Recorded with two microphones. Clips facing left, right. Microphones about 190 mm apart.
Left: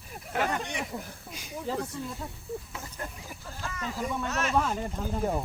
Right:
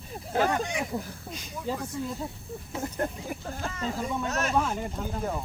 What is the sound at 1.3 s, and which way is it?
Speech, 10° left (ahead or behind).